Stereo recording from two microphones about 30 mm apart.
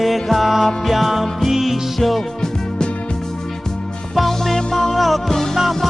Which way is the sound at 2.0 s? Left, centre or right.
Centre.